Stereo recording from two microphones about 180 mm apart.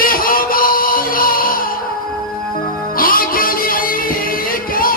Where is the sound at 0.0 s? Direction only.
50° left (ahead or behind).